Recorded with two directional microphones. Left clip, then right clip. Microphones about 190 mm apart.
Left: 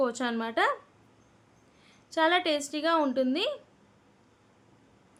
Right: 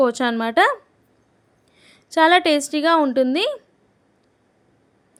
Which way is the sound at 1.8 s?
45° right (ahead or behind).